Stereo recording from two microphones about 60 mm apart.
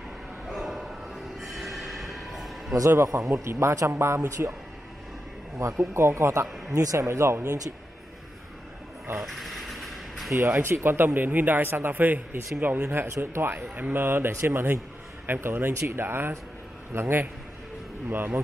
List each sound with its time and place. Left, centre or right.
0.5 s a sound: centre
2.9 s speech: right
5.8 s speech: right
9.2 s a sound: centre
10.3 s speech: right
12.8 s speech: right
15.7 s speech: right
16.0 s speech: right